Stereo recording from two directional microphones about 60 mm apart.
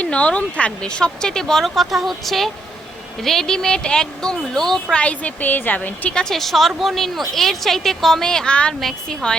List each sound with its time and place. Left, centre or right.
0.0 s a woman's voice: centre
4.9 s a woman's voice: left
6.1 s a woman's voice: centre